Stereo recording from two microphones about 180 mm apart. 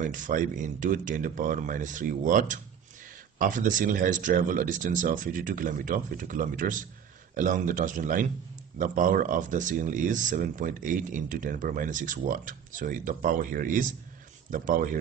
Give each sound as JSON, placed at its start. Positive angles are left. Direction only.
{"t": 0.0, "sound": "speech", "side_deg": -45}